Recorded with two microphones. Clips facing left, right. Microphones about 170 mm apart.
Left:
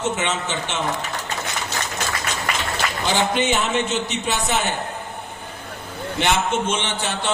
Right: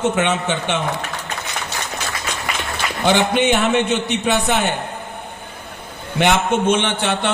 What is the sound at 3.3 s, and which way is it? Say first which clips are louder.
A man's voice: right 5 dB; 60° right (ahead or behind).